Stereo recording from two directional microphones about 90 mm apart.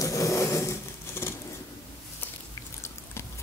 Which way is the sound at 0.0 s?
40° left (ahead or behind).